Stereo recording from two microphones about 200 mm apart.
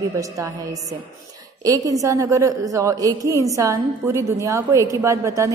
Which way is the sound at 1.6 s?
15° right (ahead or behind).